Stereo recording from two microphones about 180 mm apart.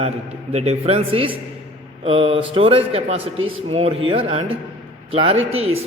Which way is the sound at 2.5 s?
30° right (ahead or behind).